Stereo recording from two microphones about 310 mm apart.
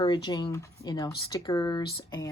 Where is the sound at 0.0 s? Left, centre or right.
Centre.